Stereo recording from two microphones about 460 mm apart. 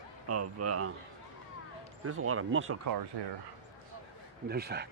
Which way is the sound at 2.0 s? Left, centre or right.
Right.